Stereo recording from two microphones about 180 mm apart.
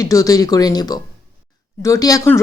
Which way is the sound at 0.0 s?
20° left (ahead or behind).